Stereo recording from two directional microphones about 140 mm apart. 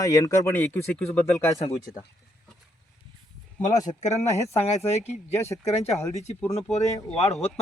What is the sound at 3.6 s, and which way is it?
Speech, 55° left (ahead or behind).